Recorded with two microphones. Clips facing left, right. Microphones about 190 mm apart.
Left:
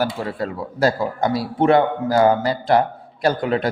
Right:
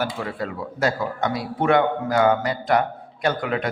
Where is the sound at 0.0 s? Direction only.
35° left (ahead or behind).